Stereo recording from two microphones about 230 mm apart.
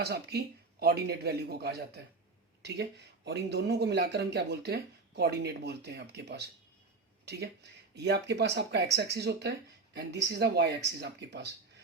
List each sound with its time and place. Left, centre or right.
0.0 s speech: right